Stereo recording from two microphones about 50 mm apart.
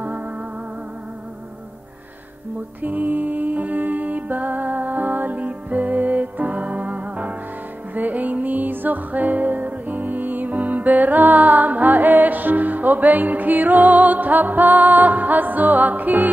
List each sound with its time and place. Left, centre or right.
2.8 s music: right